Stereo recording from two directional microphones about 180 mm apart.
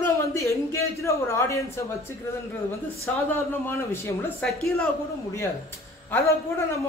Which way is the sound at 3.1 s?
10° left (ahead or behind).